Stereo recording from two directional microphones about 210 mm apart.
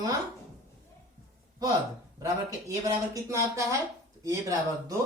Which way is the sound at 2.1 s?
15° right (ahead or behind).